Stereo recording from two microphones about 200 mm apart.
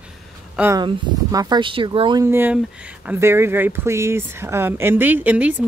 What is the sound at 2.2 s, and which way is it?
Speech, 10° right (ahead or behind).